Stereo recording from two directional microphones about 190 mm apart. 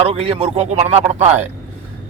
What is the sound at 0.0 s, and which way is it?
A man's voice, 30° right (ahead or behind).